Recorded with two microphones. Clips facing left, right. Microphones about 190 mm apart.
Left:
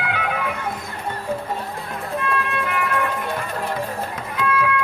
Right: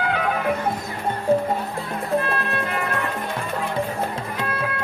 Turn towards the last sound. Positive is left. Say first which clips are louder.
# left 5 dB
turn(degrees=-35)  # may be behind; listen again after turning